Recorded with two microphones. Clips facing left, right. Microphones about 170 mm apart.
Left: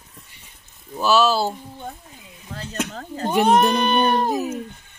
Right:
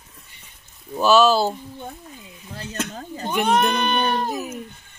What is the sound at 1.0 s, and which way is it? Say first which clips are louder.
Speech: right 2 dB; 5° left (ahead or behind).